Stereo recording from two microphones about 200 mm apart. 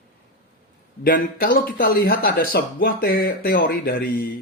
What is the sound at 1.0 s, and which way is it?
Speech, 45° left (ahead or behind).